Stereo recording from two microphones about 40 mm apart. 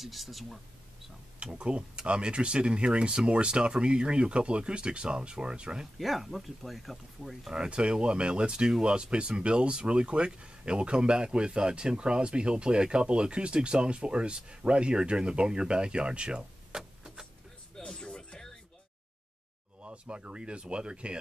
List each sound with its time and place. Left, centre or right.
0.0 s speech: centre
1.4 s speech: right
5.9 s speech: centre
7.4 s speech: right
16.7 s a sound: centre
17.7 s music: centre
19.8 s speech: right